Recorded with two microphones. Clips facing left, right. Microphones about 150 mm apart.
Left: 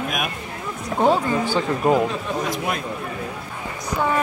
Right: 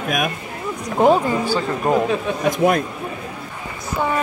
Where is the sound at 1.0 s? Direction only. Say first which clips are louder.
Right 3 dB; 10° right (ahead or behind).